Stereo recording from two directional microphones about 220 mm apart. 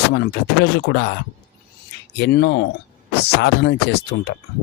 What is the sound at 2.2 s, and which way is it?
Speech, 50° left (ahead or behind).